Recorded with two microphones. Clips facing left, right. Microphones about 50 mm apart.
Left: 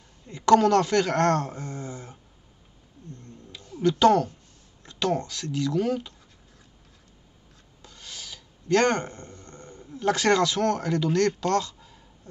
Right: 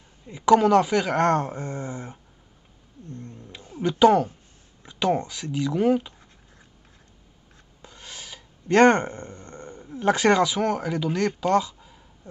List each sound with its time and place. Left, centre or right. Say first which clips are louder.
0.3 s speech: right 1 dB; centre; by 2.1 s right
3.2 s cat: right 4 dB; right; by 4.3 s centre
4.8 s speech: right 3 dB; centre
7.8 s a sound: right 1 dB; right